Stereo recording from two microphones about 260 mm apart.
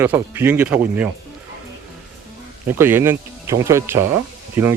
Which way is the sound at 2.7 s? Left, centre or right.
Centre.